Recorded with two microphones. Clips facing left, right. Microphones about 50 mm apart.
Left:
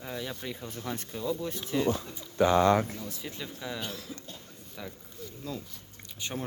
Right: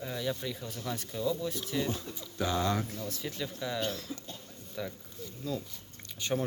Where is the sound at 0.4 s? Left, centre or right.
Left.